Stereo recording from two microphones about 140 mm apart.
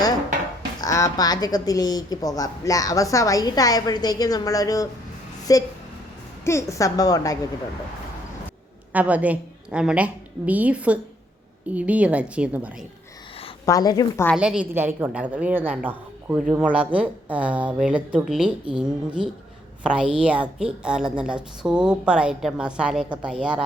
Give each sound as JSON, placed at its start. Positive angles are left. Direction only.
{"t": 0.8, "sound": "a woman's voice", "side_deg": 25}
{"t": 8.9, "sound": "a woman's voice", "side_deg": -10}
{"t": 13.7, "sound": "a woman's voice", "side_deg": 25}
{"t": 14.3, "sound": "a woman's voice", "side_deg": -5}